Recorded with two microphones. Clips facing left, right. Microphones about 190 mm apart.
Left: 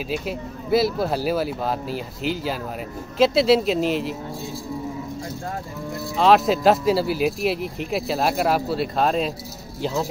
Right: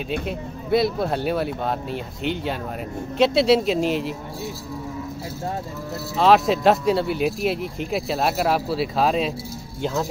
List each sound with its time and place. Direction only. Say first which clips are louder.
0.1 s speech: right 1 dB; centre (ahead or behind)
6.1 s speech: even; centre (ahead or behind)